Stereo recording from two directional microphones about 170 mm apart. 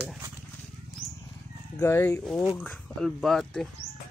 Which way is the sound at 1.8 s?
15° left (ahead or behind).